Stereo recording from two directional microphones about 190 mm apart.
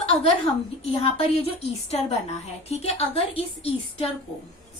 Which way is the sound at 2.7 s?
35° left (ahead or behind).